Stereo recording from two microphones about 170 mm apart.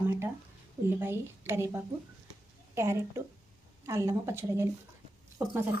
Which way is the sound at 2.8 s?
15° right (ahead or behind).